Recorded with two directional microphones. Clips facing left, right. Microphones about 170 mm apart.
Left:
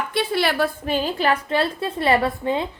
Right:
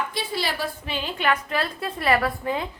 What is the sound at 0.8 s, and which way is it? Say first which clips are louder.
A woman's voice: left 5 dB; 40° left (ahead or behind).